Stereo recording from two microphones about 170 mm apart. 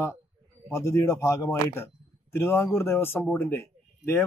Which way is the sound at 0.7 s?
15° left (ahead or behind).